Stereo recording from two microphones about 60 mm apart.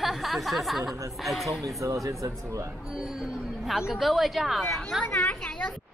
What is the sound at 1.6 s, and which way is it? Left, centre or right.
Speech, right.